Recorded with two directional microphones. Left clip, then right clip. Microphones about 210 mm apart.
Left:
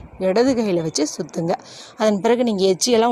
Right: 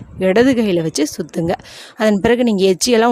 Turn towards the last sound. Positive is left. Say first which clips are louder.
# right 3 dB
turn(degrees=-25)  # may be behind; listen again after turning